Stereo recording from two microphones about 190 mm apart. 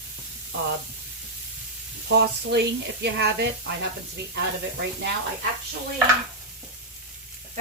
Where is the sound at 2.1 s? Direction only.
65° right (ahead or behind).